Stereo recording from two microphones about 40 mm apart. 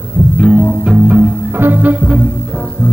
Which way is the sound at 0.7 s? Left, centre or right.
Centre.